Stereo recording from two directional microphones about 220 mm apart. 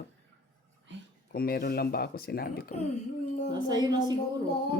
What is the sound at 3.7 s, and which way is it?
Speech, 20° right (ahead or behind).